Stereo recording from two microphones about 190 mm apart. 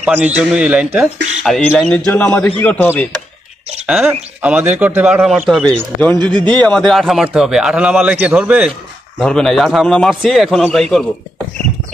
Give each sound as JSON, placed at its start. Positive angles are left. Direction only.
{"t": 0.0, "sound": "a man's voice", "side_deg": -5}
{"t": 3.8, "sound": "a man's voice", "side_deg": -5}
{"t": 6.1, "sound": "a man's voice", "side_deg": -25}
{"t": 6.5, "sound": "a man's voice", "side_deg": 5}